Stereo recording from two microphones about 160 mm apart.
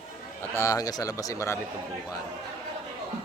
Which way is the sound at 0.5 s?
20° left (ahead or behind).